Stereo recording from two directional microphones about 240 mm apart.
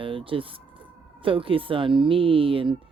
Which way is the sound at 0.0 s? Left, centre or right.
Right.